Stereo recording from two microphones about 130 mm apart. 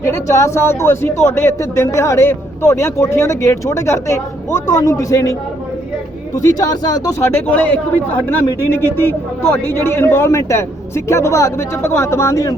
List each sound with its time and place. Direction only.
0.0 s speech: 25° left (ahead or behind)